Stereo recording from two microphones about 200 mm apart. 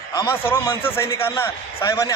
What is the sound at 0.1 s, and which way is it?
A man's voice, 15° left (ahead or behind).